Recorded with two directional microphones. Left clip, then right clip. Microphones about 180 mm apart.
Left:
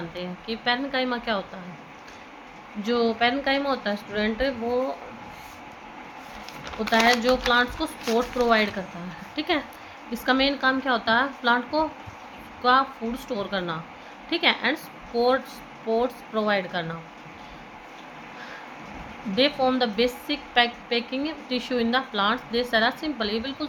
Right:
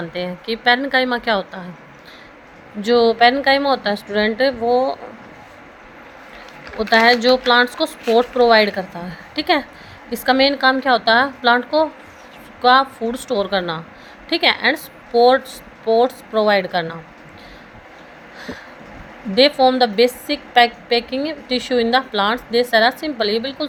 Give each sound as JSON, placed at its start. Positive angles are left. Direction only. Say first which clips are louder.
{"t": 0.1, "sound": "speech", "louder": "right 9 dB", "side_deg": -50}
{"t": 2.8, "sound": "a woman's voice", "louder": "right 10 dB", "side_deg": -40}
{"t": 6.7, "sound": "a woman's voice", "louder": "right 7 dB", "side_deg": -45}
{"t": 19.4, "sound": "a woman's voice", "louder": "right 9 dB", "side_deg": -35}